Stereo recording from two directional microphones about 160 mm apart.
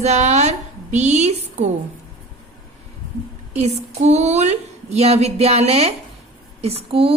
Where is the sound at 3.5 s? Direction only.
45° right (ahead or behind).